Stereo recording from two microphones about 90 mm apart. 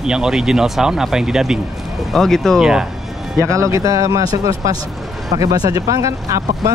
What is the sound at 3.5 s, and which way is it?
Speech, 35° right (ahead or behind).